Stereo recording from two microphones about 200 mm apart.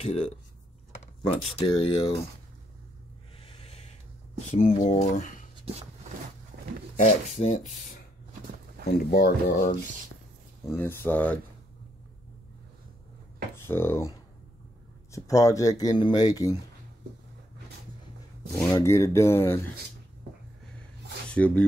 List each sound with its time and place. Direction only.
0.0 s speech: 30° left (ahead or behind)
1.3 s speech: 25° left (ahead or behind)
3.3 s a sound: 30° left (ahead or behind)
4.5 s speech: 40° left (ahead or behind)
7.0 s speech: 35° left (ahead or behind)
10.7 s speech: 10° left (ahead or behind)
13.6 s speech: 10° left (ahead or behind)
18.6 s speech: 15° left (ahead or behind)
21.3 s speech: 5° left (ahead or behind)